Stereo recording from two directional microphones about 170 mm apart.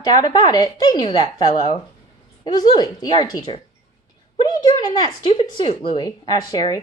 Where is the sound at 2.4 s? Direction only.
25° left (ahead or behind).